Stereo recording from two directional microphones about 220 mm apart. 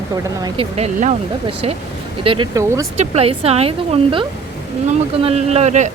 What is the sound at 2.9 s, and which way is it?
Speech, 30° right (ahead or behind).